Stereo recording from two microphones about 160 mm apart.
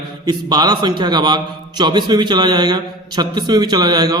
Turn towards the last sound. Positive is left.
turn(degrees=-25)  # may be behind; listen again after turning